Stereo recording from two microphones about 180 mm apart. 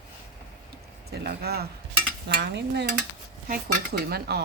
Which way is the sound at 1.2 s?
65° right (ahead or behind).